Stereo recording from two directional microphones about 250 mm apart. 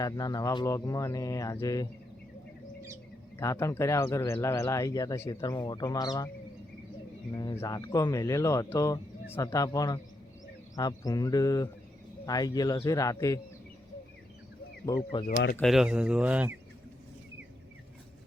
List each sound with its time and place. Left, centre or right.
0.0 s speech: centre
3.3 s speech: centre
7.3 s speech: centre
14.8 s speech: centre
15.3 s speech: left
15.5 s speech: centre